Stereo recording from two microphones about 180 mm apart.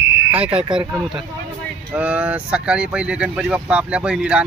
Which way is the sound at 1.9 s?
10° right (ahead or behind).